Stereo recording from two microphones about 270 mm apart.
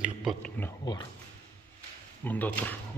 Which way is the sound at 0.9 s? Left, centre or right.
Centre.